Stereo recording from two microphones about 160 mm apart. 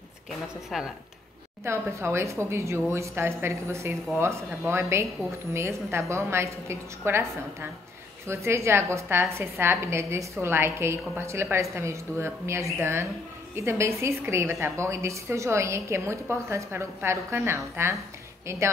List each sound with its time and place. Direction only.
0.7 s speech: centre (ahead or behind)
1.6 s a woman's voice: 15° right (ahead or behind)
8.3 s a woman's voice: 15° right (ahead or behind)